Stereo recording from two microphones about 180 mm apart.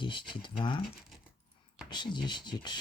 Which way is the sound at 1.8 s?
25° left (ahead or behind).